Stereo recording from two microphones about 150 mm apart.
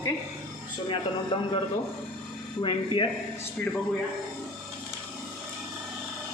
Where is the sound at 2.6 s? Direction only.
35° left (ahead or behind).